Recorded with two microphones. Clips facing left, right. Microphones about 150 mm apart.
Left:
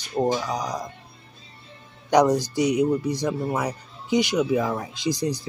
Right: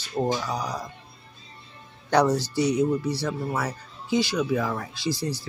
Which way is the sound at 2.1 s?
15° left (ahead or behind).